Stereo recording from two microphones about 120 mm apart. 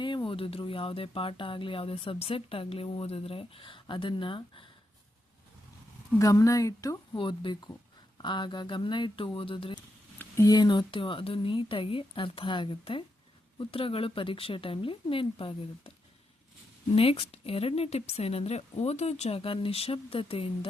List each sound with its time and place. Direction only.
0.0 s speech: 40° left (ahead or behind)
6.1 s a woman's voice: 25° left (ahead or behind)
7.2 s speech: 40° left (ahead or behind)
10.4 s speech: 35° left (ahead or behind)
16.9 s a woman's voice: 55° left (ahead or behind)